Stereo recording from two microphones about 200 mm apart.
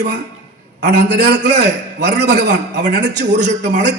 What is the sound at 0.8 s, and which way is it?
A man's voice, 55° right (ahead or behind).